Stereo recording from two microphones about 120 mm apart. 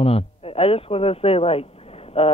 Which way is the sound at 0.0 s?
55° left (ahead or behind).